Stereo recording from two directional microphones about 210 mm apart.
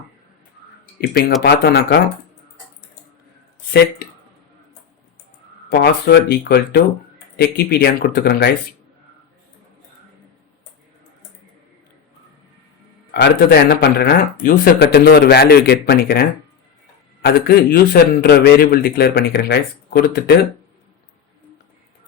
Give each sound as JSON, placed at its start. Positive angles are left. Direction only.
{"t": 1.4, "sound": "speech", "side_deg": 50}
{"t": 5.7, "sound": "speech", "side_deg": 50}
{"t": 13.1, "sound": "speech", "side_deg": 55}
{"t": 17.2, "sound": "speech", "side_deg": 50}